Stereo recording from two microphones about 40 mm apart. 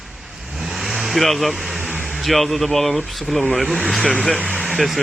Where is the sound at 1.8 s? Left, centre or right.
Centre.